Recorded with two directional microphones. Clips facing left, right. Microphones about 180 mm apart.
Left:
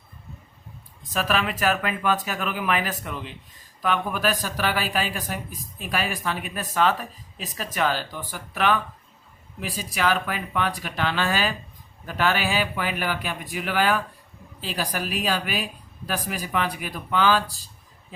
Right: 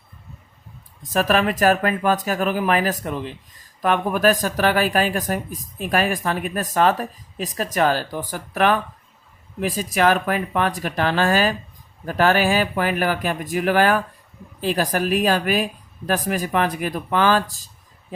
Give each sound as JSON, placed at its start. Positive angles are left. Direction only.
{"t": 1.1, "sound": "a woman's voice", "side_deg": -45}